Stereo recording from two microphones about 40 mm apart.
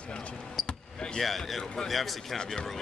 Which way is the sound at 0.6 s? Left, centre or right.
Left.